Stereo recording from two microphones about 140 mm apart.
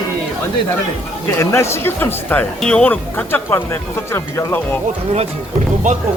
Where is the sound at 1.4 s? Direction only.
20° left (ahead or behind).